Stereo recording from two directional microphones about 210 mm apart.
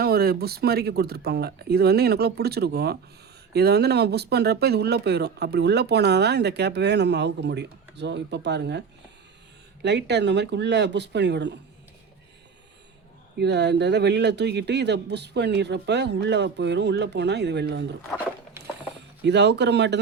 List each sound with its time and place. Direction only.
0.0 s speech: 45° right (ahead or behind)
9.8 s speech: 55° right (ahead or behind)
13.4 s speech: 55° right (ahead or behind)
19.2 s speech: 55° right (ahead or behind)